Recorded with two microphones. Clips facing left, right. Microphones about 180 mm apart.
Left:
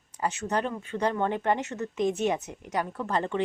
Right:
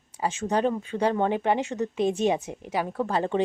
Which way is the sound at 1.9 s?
25° right (ahead or behind).